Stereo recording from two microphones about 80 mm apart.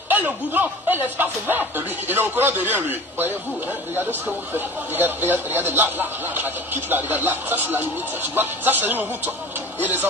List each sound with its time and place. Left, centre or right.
0.1 s speech: right
4.6 s speech: right